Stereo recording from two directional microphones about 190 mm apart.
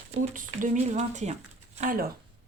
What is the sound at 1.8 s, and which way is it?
Speech, 50° right (ahead or behind).